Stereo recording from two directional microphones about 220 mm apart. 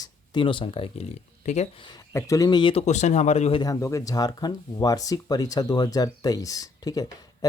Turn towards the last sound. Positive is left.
turn(degrees=15)  # may be behind; listen again after turning